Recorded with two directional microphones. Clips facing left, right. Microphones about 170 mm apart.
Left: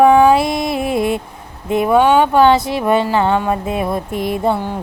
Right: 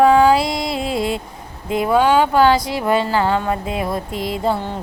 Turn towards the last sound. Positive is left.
turn(degrees=15)  # may be behind; listen again after turning